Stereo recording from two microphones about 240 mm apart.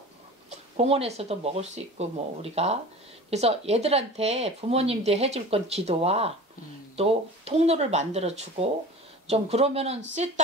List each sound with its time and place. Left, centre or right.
0.5 s speech: right